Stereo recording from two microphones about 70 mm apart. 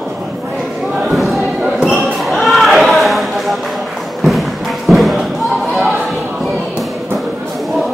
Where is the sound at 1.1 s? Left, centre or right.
Centre.